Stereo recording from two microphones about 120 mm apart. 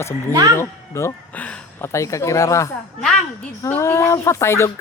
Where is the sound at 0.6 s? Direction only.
20° left (ahead or behind).